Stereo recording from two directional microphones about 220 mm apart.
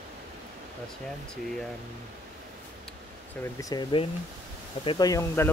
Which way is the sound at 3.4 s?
15° left (ahead or behind).